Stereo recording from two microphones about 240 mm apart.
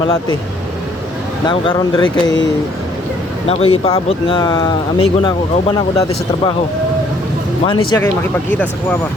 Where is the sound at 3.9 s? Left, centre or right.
Left.